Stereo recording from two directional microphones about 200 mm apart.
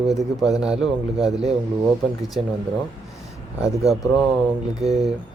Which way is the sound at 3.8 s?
Centre (ahead or behind).